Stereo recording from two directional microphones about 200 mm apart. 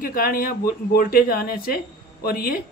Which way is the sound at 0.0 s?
45° left (ahead or behind).